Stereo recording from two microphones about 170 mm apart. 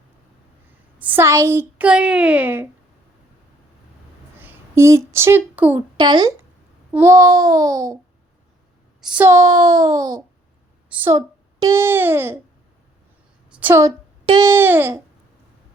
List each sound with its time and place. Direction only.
0.9 s a woman's voice: 10° right (ahead or behind)
4.4 s speech: 15° right (ahead or behind)
6.0 s a child's voice: 25° right (ahead or behind)
9.0 s a child's voice: 5° right (ahead or behind)
10.8 s a woman's voice: 10° right (ahead or behind)
13.5 s a sound: 10° right (ahead or behind)
14.3 s a woman's voice: 20° right (ahead or behind)